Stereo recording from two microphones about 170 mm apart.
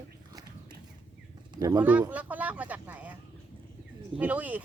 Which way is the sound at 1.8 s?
10° right (ahead or behind).